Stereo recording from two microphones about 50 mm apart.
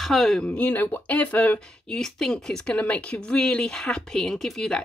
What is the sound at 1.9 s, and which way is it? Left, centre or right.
Speech, centre.